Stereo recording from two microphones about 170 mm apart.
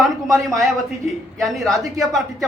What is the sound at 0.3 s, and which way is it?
Speech, centre (ahead or behind).